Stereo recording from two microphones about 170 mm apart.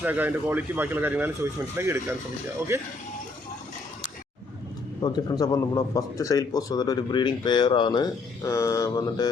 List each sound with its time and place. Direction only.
0.0 s speech: 10° right (ahead or behind)
5.0 s a man's voice: 25° left (ahead or behind)